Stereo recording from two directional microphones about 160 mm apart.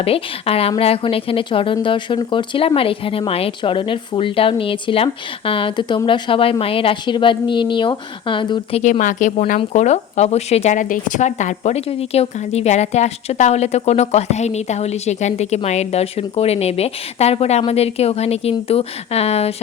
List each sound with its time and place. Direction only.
0.0 s speech: 35° left (ahead or behind)
8.8 s a woman's voice: 50° left (ahead or behind)